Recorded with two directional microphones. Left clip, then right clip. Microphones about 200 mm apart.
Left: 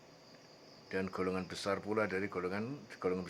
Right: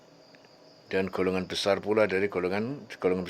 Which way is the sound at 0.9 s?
35° right (ahead or behind).